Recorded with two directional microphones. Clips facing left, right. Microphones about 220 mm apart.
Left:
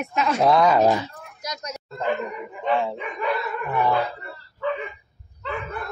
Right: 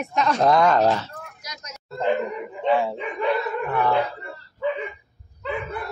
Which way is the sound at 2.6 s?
10° right (ahead or behind).